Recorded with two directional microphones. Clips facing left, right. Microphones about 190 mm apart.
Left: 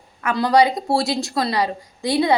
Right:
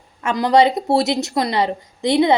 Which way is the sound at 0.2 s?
20° right (ahead or behind).